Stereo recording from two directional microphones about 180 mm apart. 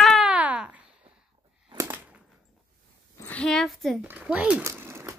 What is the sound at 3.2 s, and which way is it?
Speech, 10° left (ahead or behind).